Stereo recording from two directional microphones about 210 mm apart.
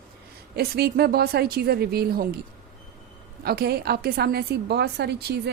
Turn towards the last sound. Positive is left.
turn(degrees=-50)  # may be behind; listen again after turning